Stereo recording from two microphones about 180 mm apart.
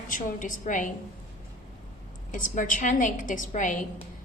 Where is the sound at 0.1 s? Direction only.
45° left (ahead or behind).